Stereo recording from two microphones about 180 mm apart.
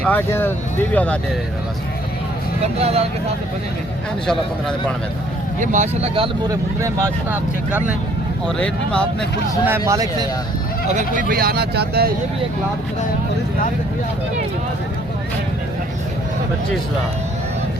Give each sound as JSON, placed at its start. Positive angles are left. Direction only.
{"t": 0.0, "sound": "speech", "side_deg": 10}
{"t": 2.7, "sound": "speech", "side_deg": -35}
{"t": 5.5, "sound": "speech", "side_deg": -40}
{"t": 6.5, "sound": "speech", "side_deg": -15}
{"t": 8.4, "sound": "speech", "side_deg": 5}
{"t": 9.6, "sound": "speech", "side_deg": -15}
{"t": 10.9, "sound": "speech", "side_deg": -50}